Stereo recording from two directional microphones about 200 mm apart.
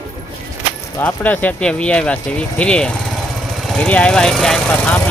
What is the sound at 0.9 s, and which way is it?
Speech, 10° left (ahead or behind).